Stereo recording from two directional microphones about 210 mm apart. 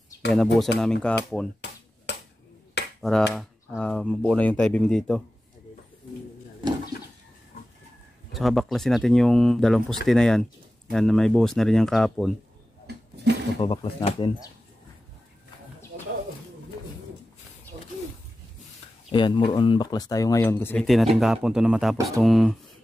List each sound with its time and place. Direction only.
0.3 s speech: centre (ahead or behind)
2.1 s finger snapping: 55° left (ahead or behind)
3.0 s speech: centre (ahead or behind)
8.3 s speech: centre (ahead or behind)
12.8 s a sound: 55° right (ahead or behind)
13.6 s speech: 25° left (ahead or behind)
15.9 s bird: 45° right (ahead or behind)
19.1 s speech: 25° left (ahead or behind); by 22.6 s centre (ahead or behind)